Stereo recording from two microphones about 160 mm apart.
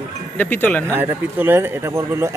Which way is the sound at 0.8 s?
15° right (ahead or behind).